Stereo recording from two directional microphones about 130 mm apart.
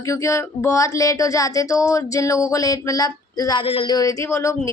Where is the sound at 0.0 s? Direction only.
25° left (ahead or behind).